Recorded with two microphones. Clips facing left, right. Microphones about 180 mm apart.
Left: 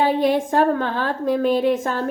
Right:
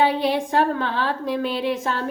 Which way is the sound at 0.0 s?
45° left (ahead or behind).